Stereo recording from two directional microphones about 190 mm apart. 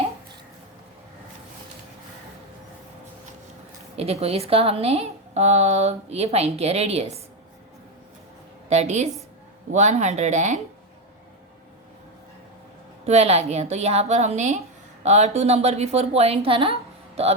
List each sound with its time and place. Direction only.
3.9 s a woman's voice: 30° right (ahead or behind)
8.7 s a woman's voice: 35° right (ahead or behind)
13.1 s a woman's voice: 35° right (ahead or behind)